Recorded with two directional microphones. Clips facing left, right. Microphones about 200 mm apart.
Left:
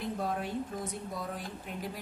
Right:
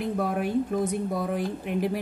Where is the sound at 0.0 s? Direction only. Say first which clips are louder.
Right 7 dB; 70° right (ahead or behind).